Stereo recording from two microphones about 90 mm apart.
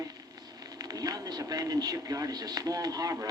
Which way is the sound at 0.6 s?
45° right (ahead or behind).